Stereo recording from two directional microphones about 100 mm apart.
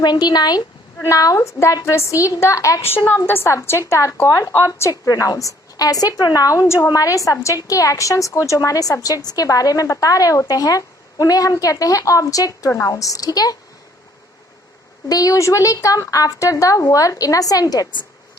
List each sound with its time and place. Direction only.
0.0 s a woman's voice: 45° left (ahead or behind)
15.1 s a woman's voice: 35° left (ahead or behind)